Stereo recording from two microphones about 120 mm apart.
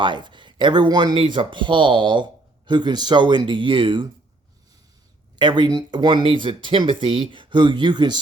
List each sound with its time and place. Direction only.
0.0 s speech: 40° right (ahead or behind)
5.4 s speech: 40° right (ahead or behind)